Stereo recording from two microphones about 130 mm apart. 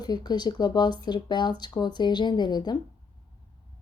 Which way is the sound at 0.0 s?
30° left (ahead or behind).